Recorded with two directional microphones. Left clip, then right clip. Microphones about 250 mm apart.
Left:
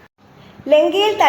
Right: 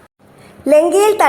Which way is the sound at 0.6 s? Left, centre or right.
Right.